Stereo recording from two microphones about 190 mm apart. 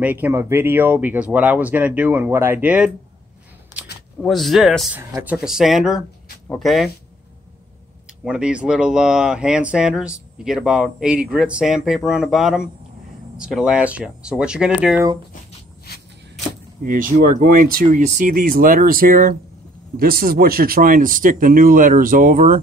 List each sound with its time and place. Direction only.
0.0 s speech: 10° right (ahead or behind)
4.2 s speech: centre (ahead or behind)
8.2 s speech: 5° right (ahead or behind)
16.8 s speech: 45° right (ahead or behind)